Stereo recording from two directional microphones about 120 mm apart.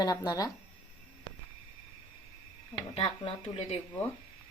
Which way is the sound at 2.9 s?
50° left (ahead or behind).